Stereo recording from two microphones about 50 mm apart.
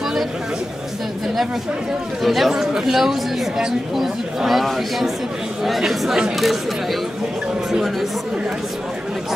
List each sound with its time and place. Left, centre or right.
2.2 s speech: centre